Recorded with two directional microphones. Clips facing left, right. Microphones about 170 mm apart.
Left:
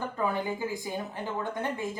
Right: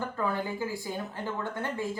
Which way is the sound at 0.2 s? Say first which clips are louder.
Left 2 dB; 20° left (ahead or behind).